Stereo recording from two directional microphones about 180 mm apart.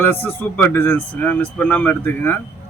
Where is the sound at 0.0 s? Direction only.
10° left (ahead or behind).